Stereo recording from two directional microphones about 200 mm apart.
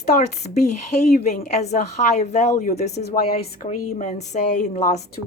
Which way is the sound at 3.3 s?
45° left (ahead or behind).